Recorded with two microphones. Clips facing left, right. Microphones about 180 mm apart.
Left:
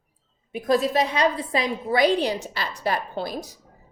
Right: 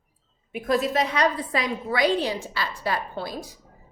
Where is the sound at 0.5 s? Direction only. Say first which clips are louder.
Left 2 dB; 35° left (ahead or behind).